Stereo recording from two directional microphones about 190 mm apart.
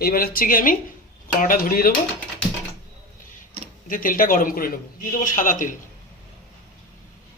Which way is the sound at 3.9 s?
45° left (ahead or behind).